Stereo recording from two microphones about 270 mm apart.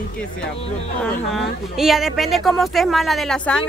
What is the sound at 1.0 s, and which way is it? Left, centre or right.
A woman's voice, centre.